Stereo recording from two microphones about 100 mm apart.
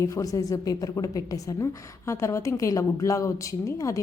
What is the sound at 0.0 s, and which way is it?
A woman's voice, 35° left (ahead or behind).